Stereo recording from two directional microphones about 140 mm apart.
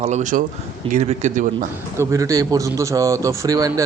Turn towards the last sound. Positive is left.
turn(degrees=-25)  # may be behind; listen again after turning